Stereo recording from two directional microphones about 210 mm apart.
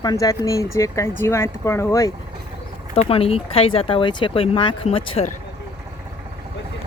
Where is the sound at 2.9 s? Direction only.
25° left (ahead or behind).